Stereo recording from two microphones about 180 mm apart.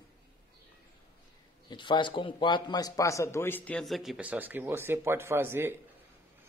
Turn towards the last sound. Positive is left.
turn(degrees=-15)  # may be behind; listen again after turning